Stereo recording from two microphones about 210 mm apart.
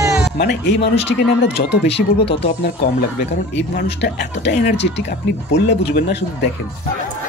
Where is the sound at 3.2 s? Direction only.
50° left (ahead or behind).